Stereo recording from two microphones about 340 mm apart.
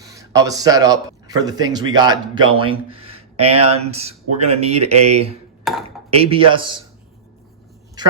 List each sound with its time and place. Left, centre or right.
0.0 s a man's voice: centre
5.7 s speech: centre
6.1 s speech: centre